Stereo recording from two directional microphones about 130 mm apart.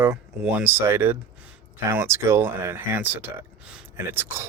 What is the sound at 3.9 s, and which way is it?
Speech, 20° right (ahead or behind).